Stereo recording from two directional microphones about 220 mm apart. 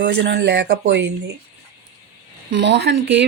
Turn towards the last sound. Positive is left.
turn(degrees=-55)  # may be behind; listen again after turning